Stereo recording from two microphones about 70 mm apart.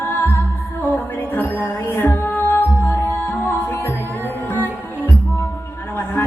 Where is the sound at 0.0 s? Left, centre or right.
Left.